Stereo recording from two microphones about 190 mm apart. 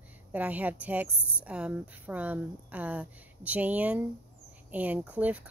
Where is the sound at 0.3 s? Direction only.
10° right (ahead or behind).